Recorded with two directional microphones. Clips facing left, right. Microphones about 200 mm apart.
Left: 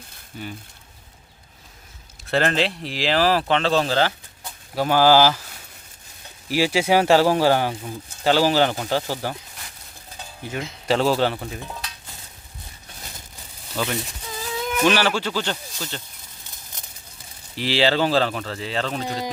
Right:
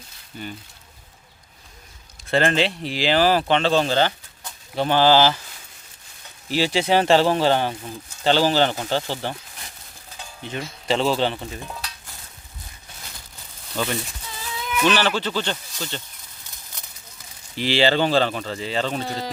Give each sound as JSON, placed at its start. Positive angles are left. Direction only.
{"t": 2.2, "sound": "speech", "side_deg": 0}
{"t": 6.5, "sound": "speech", "side_deg": 10}
{"t": 10.8, "sound": "speech", "side_deg": 5}
{"t": 13.8, "sound": "speech", "side_deg": 5}
{"t": 14.6, "sound": "a sound", "side_deg": 45}
{"t": 14.8, "sound": "speech", "side_deg": 10}
{"t": 17.6, "sound": "speech", "side_deg": 0}